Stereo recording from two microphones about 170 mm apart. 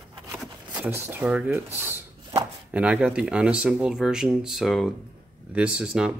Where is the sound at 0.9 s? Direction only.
10° right (ahead or behind).